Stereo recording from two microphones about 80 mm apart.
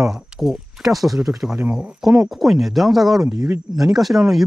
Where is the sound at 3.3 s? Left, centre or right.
Right.